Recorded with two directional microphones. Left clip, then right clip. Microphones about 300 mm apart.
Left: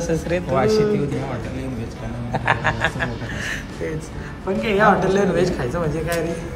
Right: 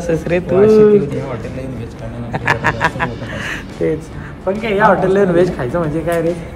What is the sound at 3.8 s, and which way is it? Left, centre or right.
Speech, right.